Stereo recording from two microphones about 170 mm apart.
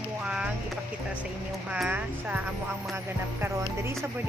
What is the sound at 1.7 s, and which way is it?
Speech, 5° right (ahead or behind).